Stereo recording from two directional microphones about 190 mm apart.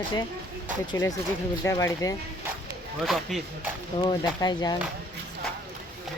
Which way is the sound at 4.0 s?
25° left (ahead or behind).